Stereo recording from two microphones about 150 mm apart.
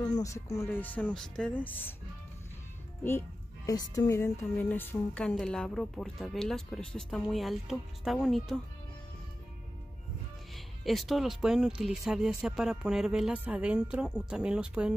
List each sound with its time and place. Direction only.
0.0 s music: 25° left (ahead or behind)
3.0 s music: 15° left (ahead or behind)
3.7 s music: 25° left (ahead or behind)
5.1 s speech: 5° left (ahead or behind)
10.5 s speech: centre (ahead or behind)